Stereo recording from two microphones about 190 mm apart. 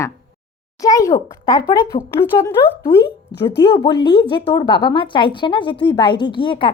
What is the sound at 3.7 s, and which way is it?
A woman's voice, 25° left (ahead or behind).